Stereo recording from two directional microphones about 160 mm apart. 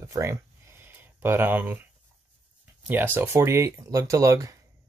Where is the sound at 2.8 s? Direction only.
10° right (ahead or behind).